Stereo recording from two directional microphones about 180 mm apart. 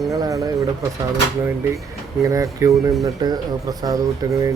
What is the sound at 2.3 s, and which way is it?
A man's voice, 15° right (ahead or behind).